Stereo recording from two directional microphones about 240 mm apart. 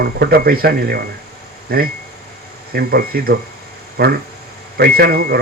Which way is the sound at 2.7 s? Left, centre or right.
Right.